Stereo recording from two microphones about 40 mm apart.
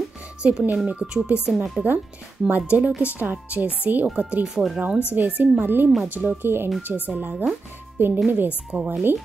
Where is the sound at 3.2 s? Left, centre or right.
Right.